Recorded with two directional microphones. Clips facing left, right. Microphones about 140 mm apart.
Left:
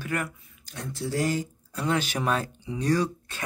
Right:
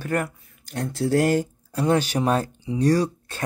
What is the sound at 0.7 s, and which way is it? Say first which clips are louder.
Speech: right 9 dB; 70° right (ahead or behind).